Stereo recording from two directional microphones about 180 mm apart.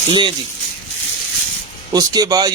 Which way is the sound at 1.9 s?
20° right (ahead or behind).